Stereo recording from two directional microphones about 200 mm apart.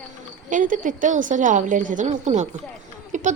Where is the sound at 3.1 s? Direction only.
40° right (ahead or behind).